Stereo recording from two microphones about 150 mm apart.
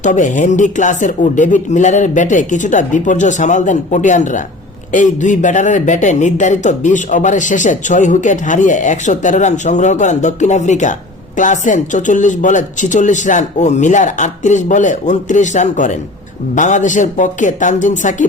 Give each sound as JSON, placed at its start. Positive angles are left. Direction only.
{"t": 0.0, "sound": "speech", "side_deg": 55}